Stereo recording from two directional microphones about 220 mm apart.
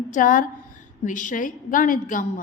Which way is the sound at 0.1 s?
40° left (ahead or behind).